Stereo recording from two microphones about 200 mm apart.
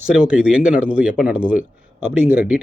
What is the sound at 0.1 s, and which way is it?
Speech, 5° right (ahead or behind).